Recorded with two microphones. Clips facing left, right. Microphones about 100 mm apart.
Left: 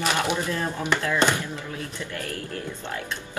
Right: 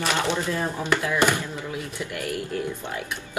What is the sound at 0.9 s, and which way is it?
Speech, 15° right (ahead or behind).